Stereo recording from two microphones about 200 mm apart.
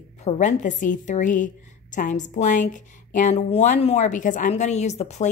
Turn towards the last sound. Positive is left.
turn(degrees=35)  # may be behind; listen again after turning